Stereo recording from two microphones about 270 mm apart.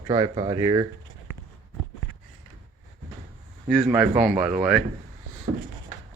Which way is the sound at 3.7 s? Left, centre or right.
Centre.